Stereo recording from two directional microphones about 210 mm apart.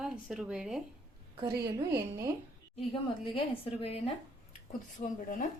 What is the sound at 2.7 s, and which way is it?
A woman's voice, 25° left (ahead or behind).